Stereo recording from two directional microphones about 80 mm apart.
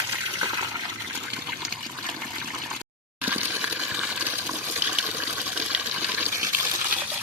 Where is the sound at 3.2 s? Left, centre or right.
Right.